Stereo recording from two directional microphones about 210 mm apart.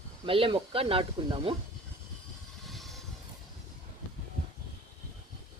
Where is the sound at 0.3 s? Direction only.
25° right (ahead or behind).